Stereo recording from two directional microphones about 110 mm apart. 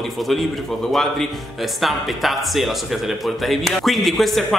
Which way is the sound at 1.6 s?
Centre (ahead or behind).